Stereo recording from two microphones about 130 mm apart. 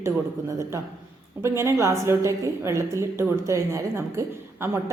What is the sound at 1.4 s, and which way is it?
A woman's voice, 20° right (ahead or behind).